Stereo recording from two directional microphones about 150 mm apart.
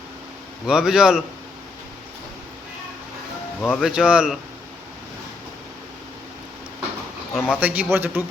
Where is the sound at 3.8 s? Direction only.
5° right (ahead or behind).